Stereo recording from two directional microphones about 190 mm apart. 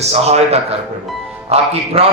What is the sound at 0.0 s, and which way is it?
A man's voice, 35° right (ahead or behind).